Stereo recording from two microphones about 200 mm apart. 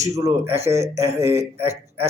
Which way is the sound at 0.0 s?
15° right (ahead or behind).